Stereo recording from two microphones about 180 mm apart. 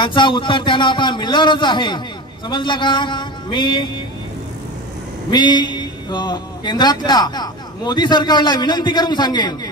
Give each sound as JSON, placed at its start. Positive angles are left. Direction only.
{"t": 0.0, "sound": "a man's voice", "side_deg": 25}
{"t": 5.3, "sound": "a man's voice", "side_deg": 25}